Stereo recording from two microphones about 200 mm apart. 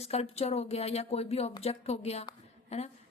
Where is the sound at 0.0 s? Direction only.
30° left (ahead or behind).